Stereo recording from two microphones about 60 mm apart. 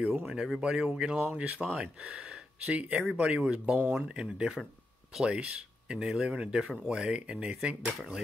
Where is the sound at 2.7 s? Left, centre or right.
Right.